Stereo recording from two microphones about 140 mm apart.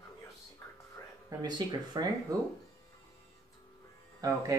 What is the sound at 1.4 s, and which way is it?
Speech, 30° right (ahead or behind).